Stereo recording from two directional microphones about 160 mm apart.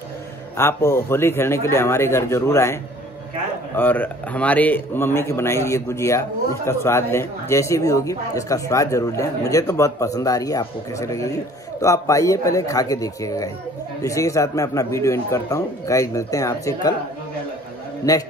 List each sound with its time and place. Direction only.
0.6 s a man's voice: 15° left (ahead or behind)